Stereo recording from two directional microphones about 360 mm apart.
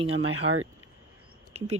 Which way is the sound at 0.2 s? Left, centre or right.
Right.